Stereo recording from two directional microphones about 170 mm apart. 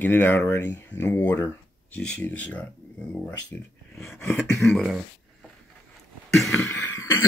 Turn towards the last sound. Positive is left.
turn(degrees=15)  # may be behind; listen again after turning